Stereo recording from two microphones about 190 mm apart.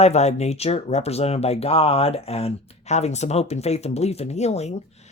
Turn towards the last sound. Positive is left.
turn(degrees=35)  # may be behind; listen again after turning